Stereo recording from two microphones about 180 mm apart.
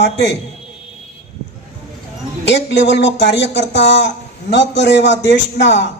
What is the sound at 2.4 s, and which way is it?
Speech, 75° left (ahead or behind).